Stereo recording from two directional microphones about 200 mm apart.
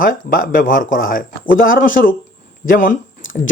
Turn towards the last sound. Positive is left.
turn(degrees=40)  # may be behind; listen again after turning